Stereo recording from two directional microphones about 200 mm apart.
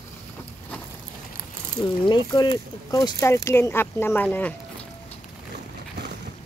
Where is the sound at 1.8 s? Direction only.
20° left (ahead or behind).